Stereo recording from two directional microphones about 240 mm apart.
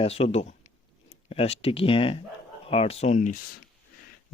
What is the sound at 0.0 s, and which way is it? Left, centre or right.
Speech, left.